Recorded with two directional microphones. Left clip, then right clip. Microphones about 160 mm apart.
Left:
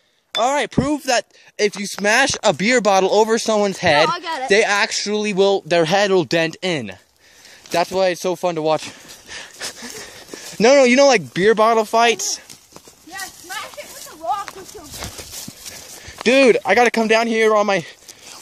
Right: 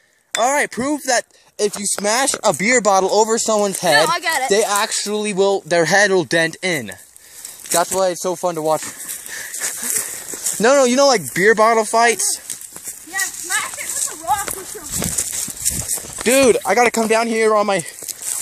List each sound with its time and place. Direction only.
0.5 s speech: centre (ahead or behind)
0.7 s speech: 10° left (ahead or behind)
2.5 s speech: 40° left (ahead or behind)
3.0 s speech: 20° left (ahead or behind)
4.1 s speech: 40° left (ahead or behind)
4.5 s speech: 15° left (ahead or behind)
10.6 s speech: 20° left (ahead or behind)
13.6 s horse: 45° left (ahead or behind)
16.3 s speech: 5° left (ahead or behind)
16.6 s speech: 35° left (ahead or behind)